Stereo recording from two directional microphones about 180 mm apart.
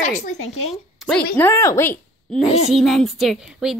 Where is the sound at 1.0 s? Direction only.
Centre (ahead or behind).